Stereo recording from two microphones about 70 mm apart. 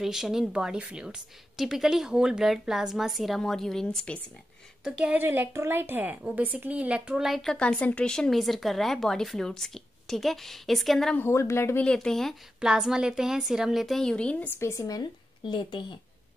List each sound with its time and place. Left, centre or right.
0.0 s a woman's voice: centre
4.8 s a woman's voice: centre
5.2 s a woman's voice: right
7.2 s a woman's voice: centre
7.4 s a woman's voice: centre
11.1 s speech: left
11.8 s speech: centre
12.5 s a woman's voice: centre
14.1 s speech: centre
14.5 s speech: left